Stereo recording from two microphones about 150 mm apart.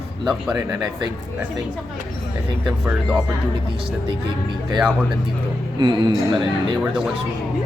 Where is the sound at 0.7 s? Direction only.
25° right (ahead or behind).